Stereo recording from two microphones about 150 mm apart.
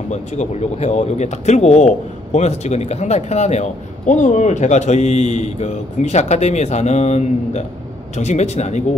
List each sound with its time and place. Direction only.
0.1 s speech: 50° left (ahead or behind)